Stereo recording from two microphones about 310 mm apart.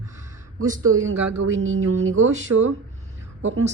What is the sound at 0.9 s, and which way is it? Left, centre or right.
Speech, right.